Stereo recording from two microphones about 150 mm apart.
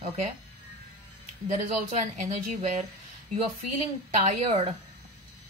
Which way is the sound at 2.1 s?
50° right (ahead or behind).